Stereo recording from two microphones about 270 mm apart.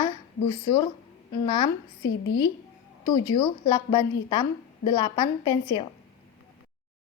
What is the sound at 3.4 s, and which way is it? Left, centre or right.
A woman's voice, centre.